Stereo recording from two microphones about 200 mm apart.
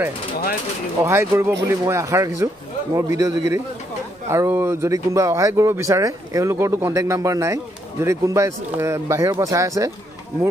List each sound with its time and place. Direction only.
1.0 s speech: 15° right (ahead or behind)